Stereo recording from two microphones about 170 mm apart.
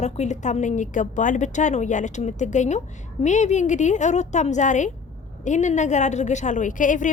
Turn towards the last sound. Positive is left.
turn(degrees=50)  # may be behind; listen again after turning